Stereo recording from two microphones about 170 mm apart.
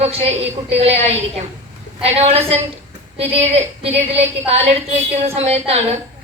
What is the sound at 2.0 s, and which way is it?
A woman's voice, 35° right (ahead or behind).